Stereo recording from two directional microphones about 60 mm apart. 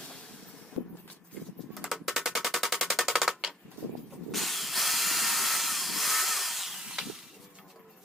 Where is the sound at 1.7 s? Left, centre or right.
Centre.